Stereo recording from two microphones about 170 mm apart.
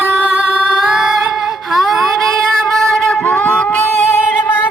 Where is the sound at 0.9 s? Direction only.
5° right (ahead or behind).